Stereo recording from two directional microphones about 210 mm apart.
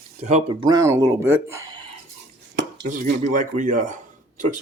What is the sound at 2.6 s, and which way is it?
Dishes, 55° right (ahead or behind).